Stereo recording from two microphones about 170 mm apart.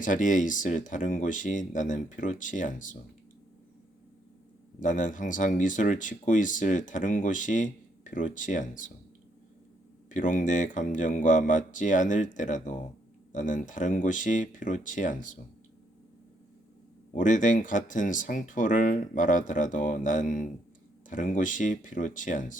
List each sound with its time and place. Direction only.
0.0 s speech: 50° left (ahead or behind)
4.8 s speech: 50° left (ahead or behind)
10.1 s speech: 50° left (ahead or behind)
17.2 s speech: 50° left (ahead or behind)